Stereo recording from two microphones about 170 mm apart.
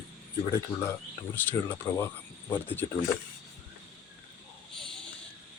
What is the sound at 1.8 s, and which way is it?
Speech, 15° left (ahead or behind).